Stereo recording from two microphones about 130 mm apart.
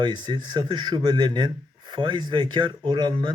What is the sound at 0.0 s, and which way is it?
A man's voice, 35° right (ahead or behind).